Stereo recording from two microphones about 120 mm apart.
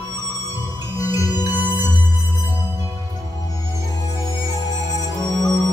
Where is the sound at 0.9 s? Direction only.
30° left (ahead or behind).